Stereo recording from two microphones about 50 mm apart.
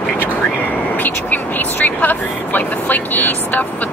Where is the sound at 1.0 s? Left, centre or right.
Left.